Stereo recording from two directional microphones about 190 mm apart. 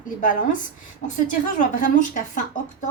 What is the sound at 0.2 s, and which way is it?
A woman's voice, 45° left (ahead or behind).